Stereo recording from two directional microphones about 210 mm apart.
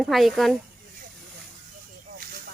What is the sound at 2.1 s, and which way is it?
Snake, 45° right (ahead or behind).